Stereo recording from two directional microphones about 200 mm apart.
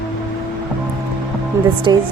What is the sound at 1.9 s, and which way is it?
Speech, 20° right (ahead or behind).